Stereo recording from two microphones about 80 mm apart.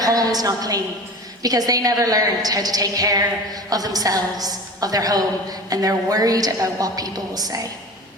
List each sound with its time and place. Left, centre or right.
0.0 s a woman's voice: right